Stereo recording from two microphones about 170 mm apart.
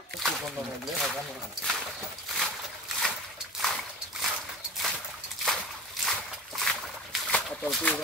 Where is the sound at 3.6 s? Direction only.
Centre (ahead or behind).